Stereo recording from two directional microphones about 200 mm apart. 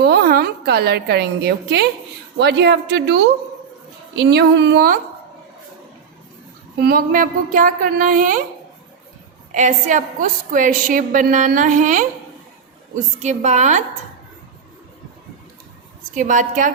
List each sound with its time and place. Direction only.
0.0 s a woman's voice: 50° right (ahead or behind)
6.7 s a woman's voice: 45° right (ahead or behind)
9.5 s a woman's voice: 40° right (ahead or behind)
16.1 s a woman's voice: 40° right (ahead or behind)